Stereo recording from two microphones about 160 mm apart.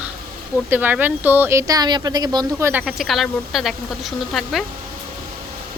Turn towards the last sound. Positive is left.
turn(degrees=0)  # may be behind; listen again after turning